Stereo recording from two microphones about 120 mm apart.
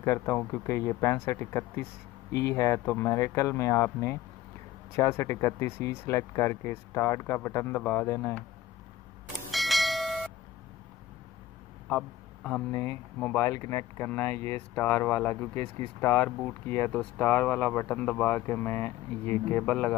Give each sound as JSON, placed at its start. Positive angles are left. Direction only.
{"t": 0.0, "sound": "speech", "side_deg": 20}
{"t": 9.5, "sound": "bell", "side_deg": 0}
{"t": 12.7, "sound": "speech", "side_deg": 20}
{"t": 16.3, "sound": "speech", "side_deg": 5}
{"t": 16.6, "sound": "speech", "side_deg": 20}